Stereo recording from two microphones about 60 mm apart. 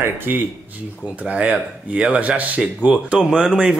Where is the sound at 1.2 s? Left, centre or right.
Centre.